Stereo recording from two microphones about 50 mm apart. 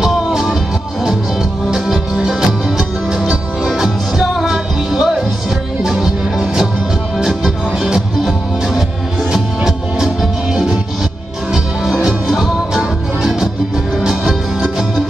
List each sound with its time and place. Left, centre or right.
0.3 s music: centre
1.7 s music: centre
12.0 s music: centre